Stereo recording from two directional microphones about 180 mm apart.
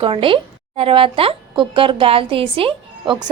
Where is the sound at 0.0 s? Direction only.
30° right (ahead or behind).